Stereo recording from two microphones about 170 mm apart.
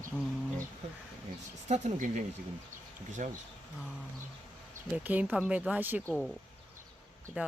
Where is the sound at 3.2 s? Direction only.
50° right (ahead or behind).